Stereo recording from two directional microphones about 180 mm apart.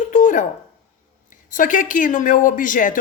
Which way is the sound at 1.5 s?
45° left (ahead or behind).